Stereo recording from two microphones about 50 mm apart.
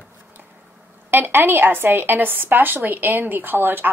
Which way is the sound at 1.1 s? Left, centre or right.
Right.